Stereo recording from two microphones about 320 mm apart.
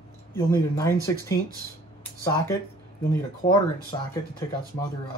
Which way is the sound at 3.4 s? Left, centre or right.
Centre.